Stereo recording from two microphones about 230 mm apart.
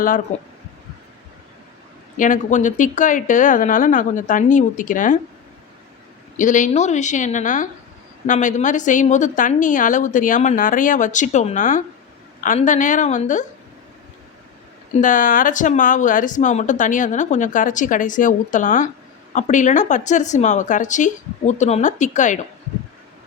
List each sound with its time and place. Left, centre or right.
0.3 s speech: left
2.1 s speech: left
6.3 s speech: left
14.9 s speech: left